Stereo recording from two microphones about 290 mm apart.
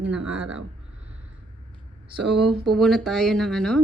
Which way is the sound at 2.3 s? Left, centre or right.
Centre.